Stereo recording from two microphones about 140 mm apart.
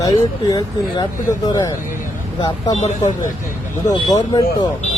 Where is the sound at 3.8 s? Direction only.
25° left (ahead or behind).